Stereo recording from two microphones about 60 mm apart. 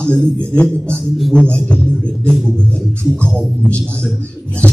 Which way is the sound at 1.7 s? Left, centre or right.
Centre.